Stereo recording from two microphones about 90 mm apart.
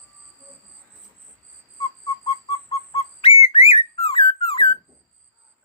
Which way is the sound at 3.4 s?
90° left.